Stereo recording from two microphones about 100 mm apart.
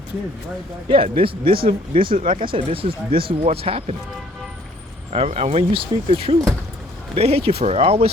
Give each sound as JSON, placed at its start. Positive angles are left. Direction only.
{"t": 0.9, "sound": "speech", "side_deg": -60}
{"t": 5.1, "sound": "speech", "side_deg": -90}
{"t": 7.2, "sound": "speech", "side_deg": -75}